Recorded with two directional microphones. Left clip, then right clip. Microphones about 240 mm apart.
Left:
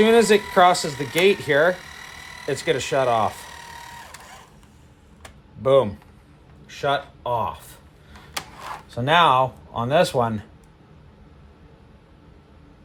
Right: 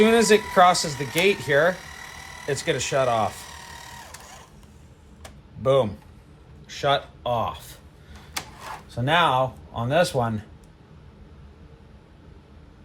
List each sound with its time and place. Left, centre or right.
0.0 s speech: left
1.8 s a sound: centre
2.5 s speech: left
3.4 s sewing machine: centre
5.6 s speech: left
8.9 s speech: left